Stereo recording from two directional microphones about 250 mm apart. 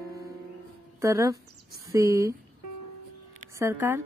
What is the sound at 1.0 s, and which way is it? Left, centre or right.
Speech, centre.